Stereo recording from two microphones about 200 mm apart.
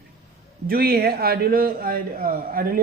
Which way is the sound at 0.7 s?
50° right (ahead or behind).